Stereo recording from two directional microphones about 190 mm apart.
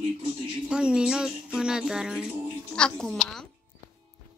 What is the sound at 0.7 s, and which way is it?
Speech, 5° right (ahead or behind).